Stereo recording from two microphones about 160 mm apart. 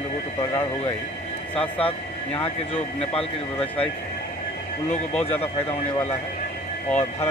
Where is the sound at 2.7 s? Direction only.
35° left (ahead or behind).